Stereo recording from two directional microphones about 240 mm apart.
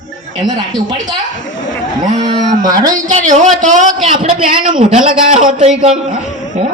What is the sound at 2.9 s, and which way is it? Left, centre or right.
A man's voice, right.